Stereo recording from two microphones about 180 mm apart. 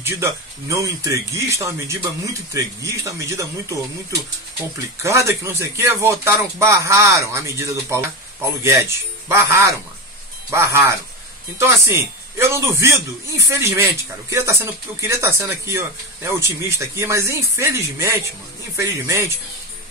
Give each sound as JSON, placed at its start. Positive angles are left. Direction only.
{"t": 0.0, "sound": "speech", "side_deg": -15}
{"t": 5.0, "sound": "speech", "side_deg": -15}
{"t": 9.3, "sound": "speech", "side_deg": -15}